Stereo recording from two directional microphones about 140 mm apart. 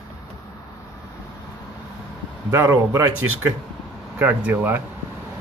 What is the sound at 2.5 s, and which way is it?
Speech, 20° right (ahead or behind).